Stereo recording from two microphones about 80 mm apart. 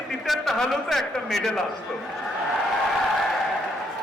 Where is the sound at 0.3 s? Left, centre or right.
Centre.